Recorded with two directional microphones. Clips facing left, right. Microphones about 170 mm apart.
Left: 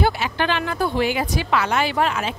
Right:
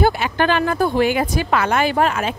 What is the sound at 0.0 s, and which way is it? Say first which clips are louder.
Speech: right 4 dB; 45° right (ahead or behind).